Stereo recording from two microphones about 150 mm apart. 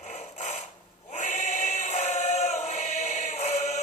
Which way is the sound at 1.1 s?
50° left (ahead or behind).